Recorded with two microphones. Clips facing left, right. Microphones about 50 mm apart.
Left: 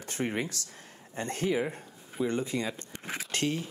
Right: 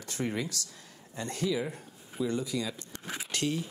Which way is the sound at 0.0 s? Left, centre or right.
Left.